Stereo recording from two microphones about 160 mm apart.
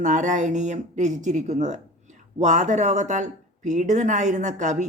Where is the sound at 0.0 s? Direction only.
50° right (ahead or behind).